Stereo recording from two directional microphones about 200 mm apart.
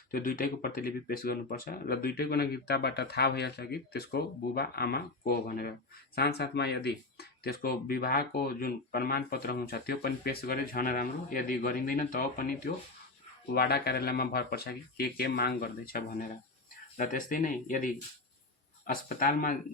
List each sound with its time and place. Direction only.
0.1 s speech: 45° left (ahead or behind)
19.0 s speech: 45° left (ahead or behind)